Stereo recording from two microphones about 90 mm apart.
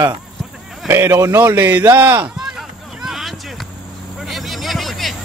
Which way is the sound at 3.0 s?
5° right (ahead or behind).